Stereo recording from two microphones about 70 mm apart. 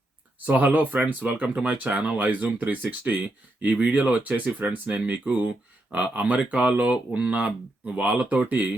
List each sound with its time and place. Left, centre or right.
0.3 s speech: right